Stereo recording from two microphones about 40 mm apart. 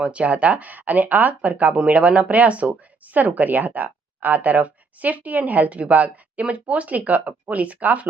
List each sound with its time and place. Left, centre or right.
0.0 s speech: right